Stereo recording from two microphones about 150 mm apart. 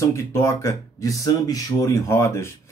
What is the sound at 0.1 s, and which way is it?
A man's voice, 20° left (ahead or behind).